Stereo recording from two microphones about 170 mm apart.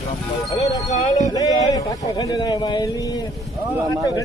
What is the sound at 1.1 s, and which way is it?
A man's voice, 20° left (ahead or behind).